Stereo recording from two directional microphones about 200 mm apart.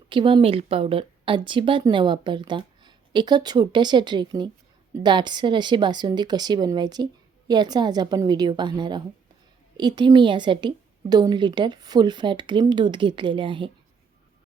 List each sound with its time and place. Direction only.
0.1 s a woman's voice: 25° right (ahead or behind)